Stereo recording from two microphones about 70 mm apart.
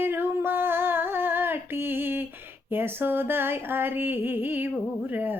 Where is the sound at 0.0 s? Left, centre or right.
Right.